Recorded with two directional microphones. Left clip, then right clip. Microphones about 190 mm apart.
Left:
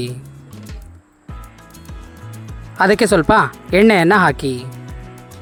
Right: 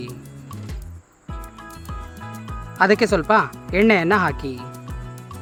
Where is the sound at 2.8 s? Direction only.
40° left (ahead or behind).